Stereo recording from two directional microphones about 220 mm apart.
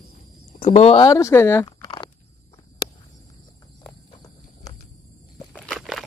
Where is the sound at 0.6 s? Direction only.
30° left (ahead or behind).